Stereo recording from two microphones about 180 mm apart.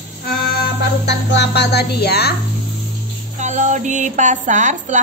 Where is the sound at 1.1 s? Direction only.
65° left (ahead or behind).